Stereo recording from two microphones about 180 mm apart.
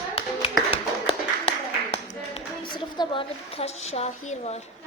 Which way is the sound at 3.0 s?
30° left (ahead or behind).